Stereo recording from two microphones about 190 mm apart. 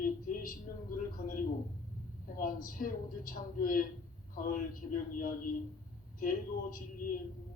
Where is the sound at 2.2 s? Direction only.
50° left (ahead or behind).